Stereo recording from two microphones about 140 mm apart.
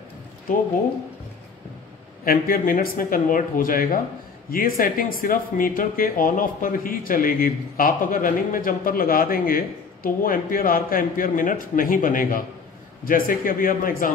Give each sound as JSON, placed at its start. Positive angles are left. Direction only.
{"t": 2.2, "sound": "speech", "side_deg": 90}
{"t": 13.0, "sound": "speech", "side_deg": 90}